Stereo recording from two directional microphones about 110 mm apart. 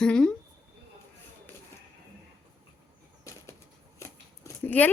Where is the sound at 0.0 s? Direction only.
5° left (ahead or behind).